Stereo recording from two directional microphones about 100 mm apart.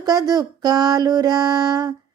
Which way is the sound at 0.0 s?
40° right (ahead or behind).